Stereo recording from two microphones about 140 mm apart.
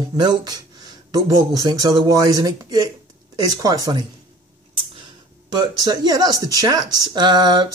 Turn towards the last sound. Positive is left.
turn(degrees=-30)  # may be behind; listen again after turning